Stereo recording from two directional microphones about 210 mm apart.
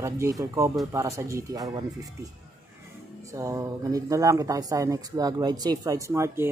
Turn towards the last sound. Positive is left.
turn(degrees=-10)  # may be behind; listen again after turning